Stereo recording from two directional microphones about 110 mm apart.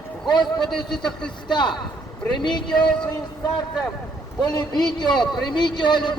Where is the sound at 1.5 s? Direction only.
45° left (ahead or behind).